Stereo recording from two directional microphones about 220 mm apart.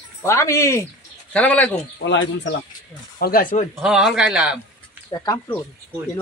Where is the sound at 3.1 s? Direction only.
40° left (ahead or behind).